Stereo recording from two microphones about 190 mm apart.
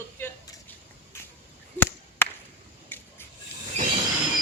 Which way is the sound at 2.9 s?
10° left (ahead or behind).